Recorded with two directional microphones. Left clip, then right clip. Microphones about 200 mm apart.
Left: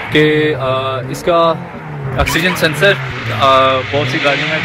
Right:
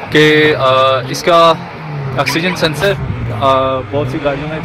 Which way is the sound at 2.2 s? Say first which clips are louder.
Even; 10° right (ahead or behind).